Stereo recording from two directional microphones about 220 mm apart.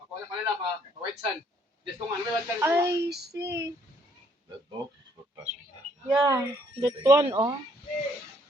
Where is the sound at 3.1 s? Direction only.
45° right (ahead or behind).